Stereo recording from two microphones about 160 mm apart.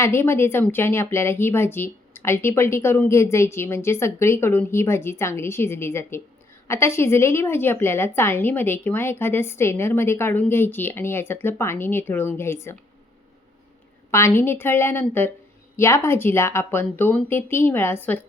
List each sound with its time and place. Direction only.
0.0 s speech: 15° left (ahead or behind)
14.1 s speech: 15° left (ahead or behind)